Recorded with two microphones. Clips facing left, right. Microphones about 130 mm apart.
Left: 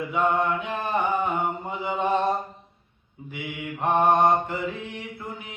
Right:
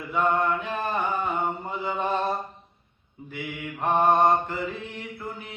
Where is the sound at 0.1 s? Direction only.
15° left (ahead or behind).